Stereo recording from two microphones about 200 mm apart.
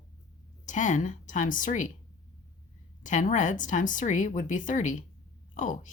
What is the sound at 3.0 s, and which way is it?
Speech, 40° left (ahead or behind).